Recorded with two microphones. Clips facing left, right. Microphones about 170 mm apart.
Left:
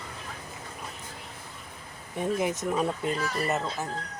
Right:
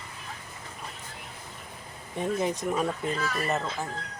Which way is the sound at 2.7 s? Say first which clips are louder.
Left 1 dB; 5° left (ahead or behind).